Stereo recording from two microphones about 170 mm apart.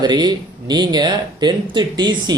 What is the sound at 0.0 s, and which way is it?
Speech, 25° right (ahead or behind).